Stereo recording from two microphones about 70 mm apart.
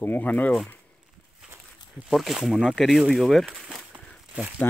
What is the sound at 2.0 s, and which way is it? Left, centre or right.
Speech, centre.